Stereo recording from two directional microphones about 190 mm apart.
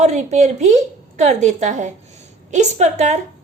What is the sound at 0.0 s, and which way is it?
A woman's voice, 35° right (ahead or behind).